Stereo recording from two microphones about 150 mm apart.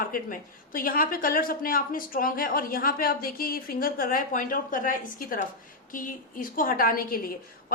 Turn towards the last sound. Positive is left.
turn(degrees=75)  # may be behind; listen again after turning